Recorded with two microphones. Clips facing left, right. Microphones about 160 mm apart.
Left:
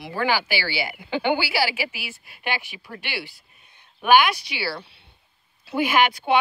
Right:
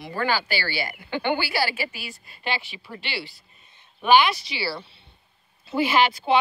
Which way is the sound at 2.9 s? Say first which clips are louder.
Even; 5° right (ahead or behind).